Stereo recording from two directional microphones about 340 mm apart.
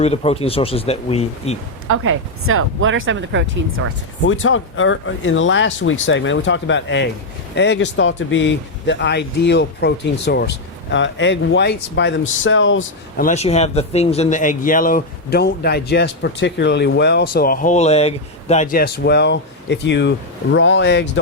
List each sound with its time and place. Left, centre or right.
0.0 s speech: centre
1.9 s speech: right
4.2 s speech: left
13.2 s speech: centre